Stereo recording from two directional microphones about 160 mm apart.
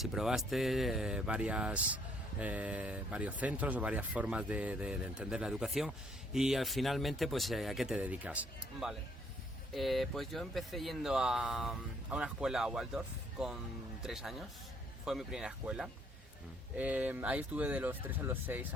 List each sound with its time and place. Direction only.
0.0 s speech: centre (ahead or behind)